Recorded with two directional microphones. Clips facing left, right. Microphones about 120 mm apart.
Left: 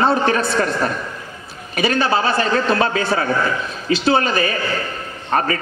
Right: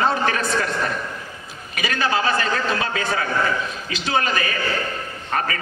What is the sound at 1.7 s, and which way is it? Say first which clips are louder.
A man's voice: left 5 dB; 35° left (ahead or behind).